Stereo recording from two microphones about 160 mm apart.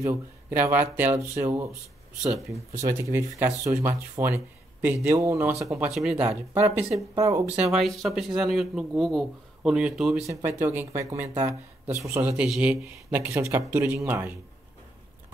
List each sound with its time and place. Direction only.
0.6 s speech: 10° right (ahead or behind)
2.8 s speech: 20° right (ahead or behind)
5.6 s speech: centre (ahead or behind); by 7.5 s 20° right (ahead or behind)
7.5 s speech: 5° right (ahead or behind)
10.2 s speech: 15° right (ahead or behind)
12.4 s speech: 5° right (ahead or behind)